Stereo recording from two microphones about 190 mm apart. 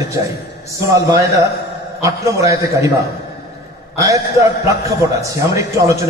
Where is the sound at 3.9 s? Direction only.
15° right (ahead or behind).